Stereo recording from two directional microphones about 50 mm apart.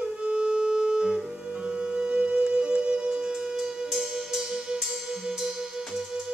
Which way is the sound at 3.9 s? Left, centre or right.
Centre.